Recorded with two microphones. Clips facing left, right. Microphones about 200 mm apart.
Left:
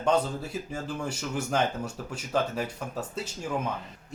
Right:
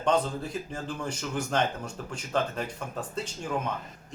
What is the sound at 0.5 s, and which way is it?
Speech, 10° left (ahead or behind).